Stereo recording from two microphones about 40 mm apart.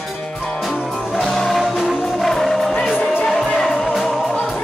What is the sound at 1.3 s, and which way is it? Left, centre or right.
Music, centre.